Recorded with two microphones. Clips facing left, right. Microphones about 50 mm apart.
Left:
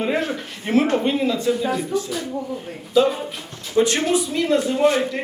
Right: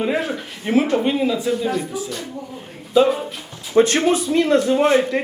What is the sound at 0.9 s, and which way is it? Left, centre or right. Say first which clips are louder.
Speech: right 1 dB; centre.